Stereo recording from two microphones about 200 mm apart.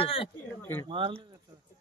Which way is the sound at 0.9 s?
25° right (ahead or behind).